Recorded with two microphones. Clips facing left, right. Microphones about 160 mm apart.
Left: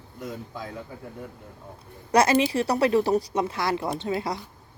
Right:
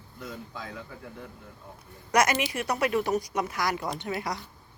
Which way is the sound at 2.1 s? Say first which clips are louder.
Left 5 dB; 30° left (ahead or behind).